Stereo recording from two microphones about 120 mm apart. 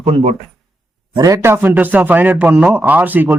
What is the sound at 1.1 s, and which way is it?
A man's voice, 30° right (ahead or behind).